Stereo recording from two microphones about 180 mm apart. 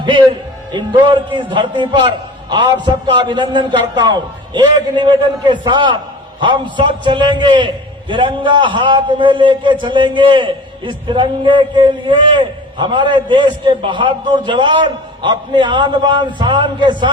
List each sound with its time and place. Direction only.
0.0 s a man's voice: 25° right (ahead or behind)